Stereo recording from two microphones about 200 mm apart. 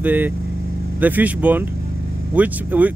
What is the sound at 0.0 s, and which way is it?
Speech, 10° right (ahead or behind).